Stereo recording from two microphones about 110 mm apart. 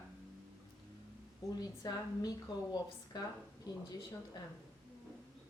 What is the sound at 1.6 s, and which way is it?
A woman's voice, 35° left (ahead or behind).